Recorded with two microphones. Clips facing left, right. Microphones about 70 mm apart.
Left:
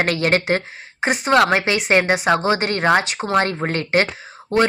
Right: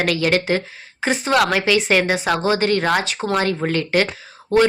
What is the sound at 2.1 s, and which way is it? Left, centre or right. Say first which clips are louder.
Speech: left 2 dB; left.